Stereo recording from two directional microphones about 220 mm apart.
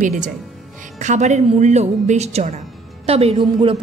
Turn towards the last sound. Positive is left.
turn(degrees=-25)  # may be behind; listen again after turning